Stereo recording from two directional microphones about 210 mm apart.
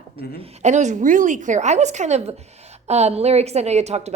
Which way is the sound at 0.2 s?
35° right (ahead or behind).